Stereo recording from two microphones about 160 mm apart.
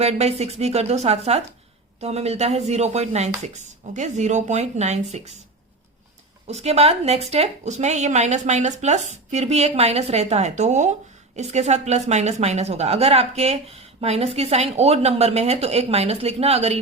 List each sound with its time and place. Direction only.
0.0 s a woman's voice: 40° right (ahead or behind)
6.5 s a woman's voice: 40° right (ahead or behind)